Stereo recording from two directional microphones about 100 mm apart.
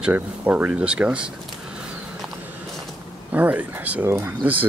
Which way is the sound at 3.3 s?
15° right (ahead or behind).